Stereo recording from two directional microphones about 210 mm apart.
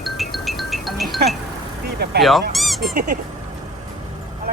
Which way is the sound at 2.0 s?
50° right (ahead or behind).